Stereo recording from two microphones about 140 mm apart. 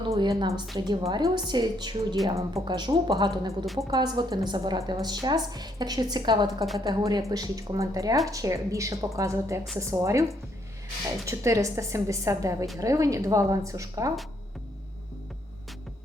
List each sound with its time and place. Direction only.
0.1 s a woman's voice: 30° right (ahead or behind)
11.3 s a woman's voice: 20° right (ahead or behind)